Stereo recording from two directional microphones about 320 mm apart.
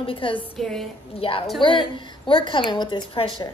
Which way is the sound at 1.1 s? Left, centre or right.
Centre.